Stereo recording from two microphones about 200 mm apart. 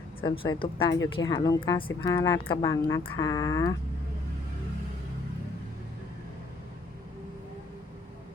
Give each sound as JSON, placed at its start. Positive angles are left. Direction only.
{"t": 0.2, "sound": "a woman's voice", "side_deg": 25}